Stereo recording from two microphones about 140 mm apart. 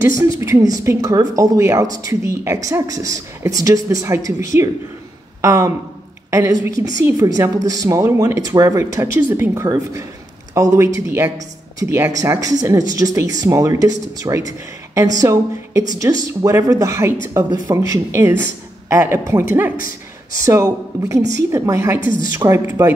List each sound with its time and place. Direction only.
0.0 s speech: 20° right (ahead or behind)
20.4 s speech: 25° right (ahead or behind)